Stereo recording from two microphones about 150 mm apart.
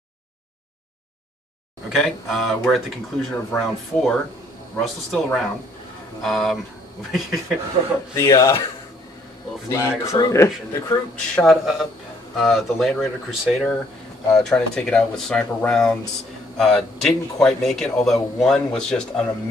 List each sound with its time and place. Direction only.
1.9 s a man's voice: centre (ahead or behind)
8.1 s speech: 20° left (ahead or behind)
9.7 s speech: 20° left (ahead or behind)
11.3 s a man's voice: centre (ahead or behind)